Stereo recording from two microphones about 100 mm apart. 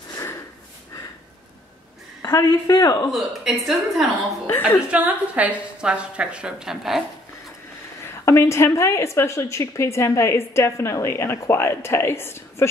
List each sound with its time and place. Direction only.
2.2 s a man's voice: 30° left (ahead or behind)
3.1 s a woman's voice: centre (ahead or behind)
4.5 s a woman's voice: 25° left (ahead or behind)
4.9 s a woman's voice: 15° right (ahead or behind)
8.1 s a woman's voice: 25° left (ahead or behind)